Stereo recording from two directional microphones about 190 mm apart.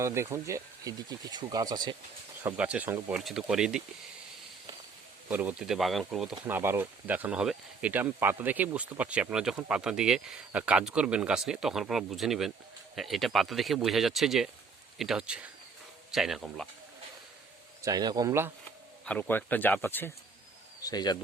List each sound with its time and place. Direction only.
0.0 s speech: 15° right (ahead or behind)
2.4 s speech: 5° right (ahead or behind)
5.3 s speech: 10° right (ahead or behind)
6.4 s speech: 10° right (ahead or behind)
17.8 s speech: 20° right (ahead or behind)
19.0 s speech: 10° left (ahead or behind)
20.8 s speech: 20° left (ahead or behind)